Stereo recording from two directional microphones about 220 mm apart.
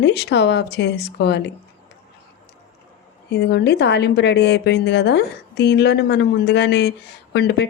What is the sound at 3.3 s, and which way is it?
Speech, 50° left (ahead or behind).